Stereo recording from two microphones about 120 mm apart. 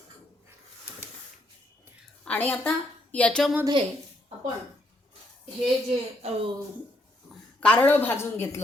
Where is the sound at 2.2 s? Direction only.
15° left (ahead or behind).